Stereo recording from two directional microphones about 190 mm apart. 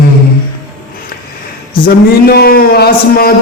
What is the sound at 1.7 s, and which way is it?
Speech, 55° left (ahead or behind).